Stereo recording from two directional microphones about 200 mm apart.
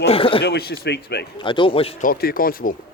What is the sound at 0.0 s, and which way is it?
Speech, 30° left (ahead or behind).